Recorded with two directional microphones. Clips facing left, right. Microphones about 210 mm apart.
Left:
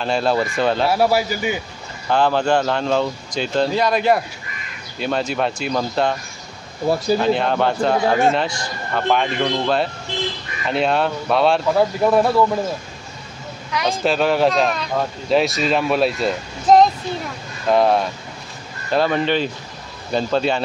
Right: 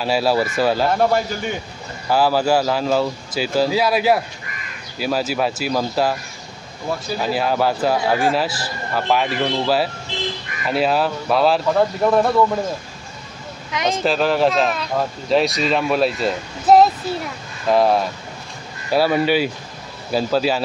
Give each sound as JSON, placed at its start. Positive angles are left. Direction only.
{"t": 0.0, "sound": "speech", "side_deg": -5}
{"t": 0.8, "sound": "speech", "side_deg": 5}
{"t": 2.0, "sound": "speech", "side_deg": -5}
{"t": 7.2, "sound": "speech", "side_deg": -5}
{"t": 13.8, "sound": "speech", "side_deg": 0}